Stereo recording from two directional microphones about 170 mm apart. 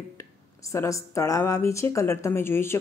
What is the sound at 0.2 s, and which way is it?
A woman's voice, 20° left (ahead or behind).